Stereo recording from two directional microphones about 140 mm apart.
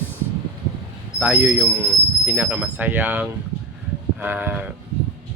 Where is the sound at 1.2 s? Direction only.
10° right (ahead or behind).